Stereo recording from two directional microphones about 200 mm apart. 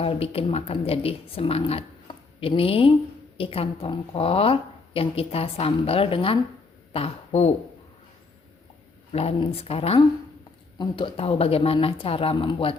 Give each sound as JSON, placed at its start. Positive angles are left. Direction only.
{"t": 0.0, "sound": "speech", "side_deg": 30}
{"t": 9.1, "sound": "speech", "side_deg": 30}